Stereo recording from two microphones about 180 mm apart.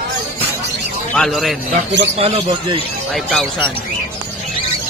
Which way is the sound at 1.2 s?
Centre (ahead or behind).